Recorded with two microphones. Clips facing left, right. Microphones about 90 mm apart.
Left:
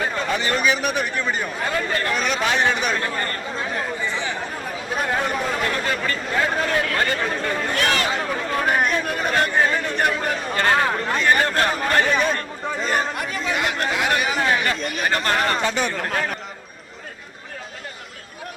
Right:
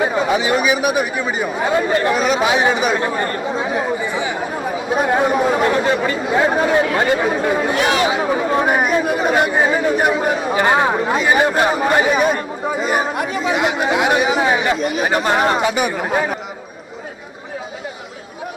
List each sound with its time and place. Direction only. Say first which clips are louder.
0.0 s speech: right 7 dB; 10° right (ahead or behind)